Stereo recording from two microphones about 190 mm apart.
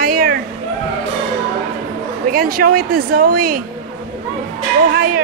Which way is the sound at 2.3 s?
50° right (ahead or behind).